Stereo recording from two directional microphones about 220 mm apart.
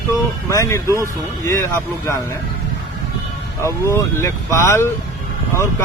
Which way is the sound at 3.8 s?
15° left (ahead or behind).